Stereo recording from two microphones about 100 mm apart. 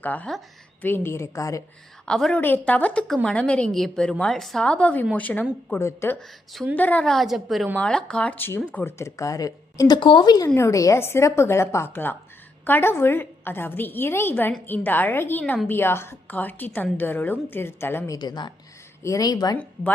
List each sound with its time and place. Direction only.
0.0 s a woman's voice: 15° left (ahead or behind); by 1.6 s 35° left (ahead or behind)
2.0 s a woman's voice: 5° left (ahead or behind)
2.4 s a woman's voice: 15° left (ahead or behind)
7.1 s a woman's voice: centre (ahead or behind)
7.8 s a woman's voice: 10° left (ahead or behind); by 10.5 s 45° left (ahead or behind)
10.5 s a woman's voice: 30° left (ahead or behind)
18.1 s a woman's voice: 45° left (ahead or behind)